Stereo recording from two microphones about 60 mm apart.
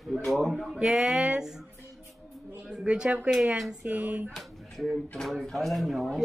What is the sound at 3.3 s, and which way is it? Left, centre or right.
Speech, centre.